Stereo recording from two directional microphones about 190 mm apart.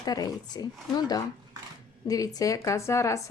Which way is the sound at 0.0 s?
20° left (ahead or behind).